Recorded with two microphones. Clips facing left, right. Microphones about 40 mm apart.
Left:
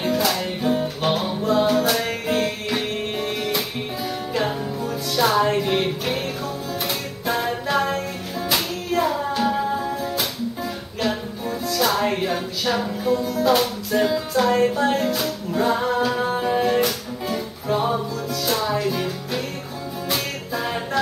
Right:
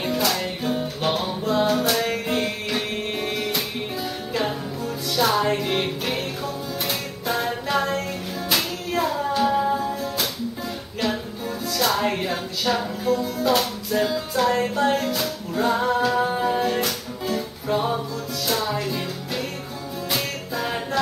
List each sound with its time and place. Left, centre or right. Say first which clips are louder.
0.0 s music: left 2 dB; centre